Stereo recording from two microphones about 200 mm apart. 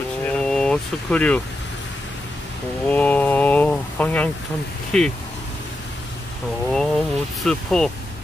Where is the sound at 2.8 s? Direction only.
10° left (ahead or behind).